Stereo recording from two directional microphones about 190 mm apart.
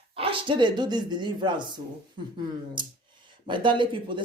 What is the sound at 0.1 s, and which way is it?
Speech, 30° right (ahead or behind).